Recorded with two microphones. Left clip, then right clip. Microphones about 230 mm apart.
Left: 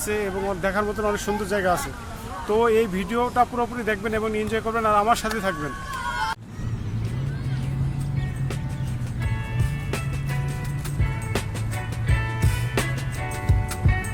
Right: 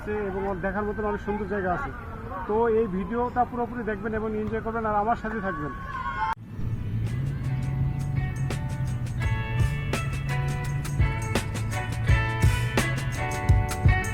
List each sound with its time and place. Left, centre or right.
0.1 s speech: left
9.6 s music: centre
12.0 s music: centre